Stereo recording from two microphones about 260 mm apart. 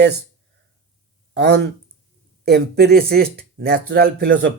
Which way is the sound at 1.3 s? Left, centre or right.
Right.